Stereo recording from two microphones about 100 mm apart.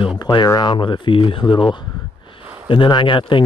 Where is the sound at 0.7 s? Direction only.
55° left (ahead or behind).